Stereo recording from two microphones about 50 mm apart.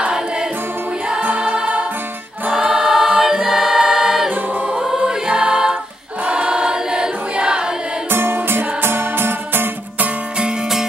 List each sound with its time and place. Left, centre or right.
0.0 s music: centre
2.5 s choir: centre
8.1 s music: right